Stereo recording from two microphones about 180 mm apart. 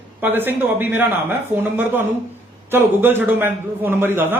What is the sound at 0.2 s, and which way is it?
A man's voice, 10° right (ahead or behind).